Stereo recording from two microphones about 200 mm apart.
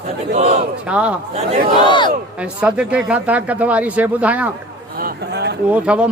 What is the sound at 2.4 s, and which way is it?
Speech, 5° right (ahead or behind).